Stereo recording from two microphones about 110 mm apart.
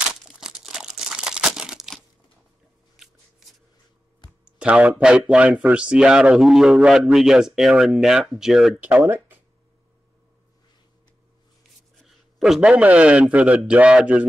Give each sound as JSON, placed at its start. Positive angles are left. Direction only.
{"t": 0.1, "sound": "crumpling", "side_deg": -5}
{"t": 4.6, "sound": "speech", "side_deg": -10}
{"t": 8.8, "sound": "speech", "side_deg": -20}
{"t": 12.0, "sound": "a man's voice", "side_deg": 0}